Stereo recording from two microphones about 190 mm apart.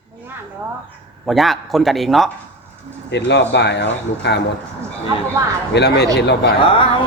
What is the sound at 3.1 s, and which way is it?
Speech, 65° left (ahead or behind).